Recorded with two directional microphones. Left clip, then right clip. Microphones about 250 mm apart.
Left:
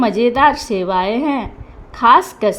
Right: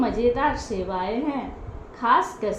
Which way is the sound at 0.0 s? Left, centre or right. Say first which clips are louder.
Left 9 dB; left.